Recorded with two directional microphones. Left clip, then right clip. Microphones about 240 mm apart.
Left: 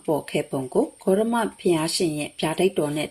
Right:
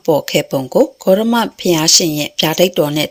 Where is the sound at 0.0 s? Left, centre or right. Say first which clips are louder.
Right 11 dB; right.